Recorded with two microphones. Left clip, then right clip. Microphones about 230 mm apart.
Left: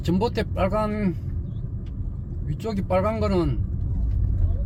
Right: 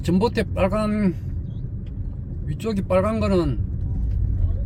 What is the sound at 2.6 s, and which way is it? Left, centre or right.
Speech, centre.